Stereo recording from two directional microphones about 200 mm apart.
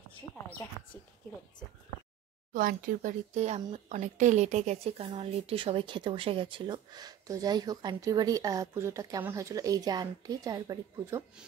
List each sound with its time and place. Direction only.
2.5 s speech: 45° right (ahead or behind); by 11.2 s 15° right (ahead or behind)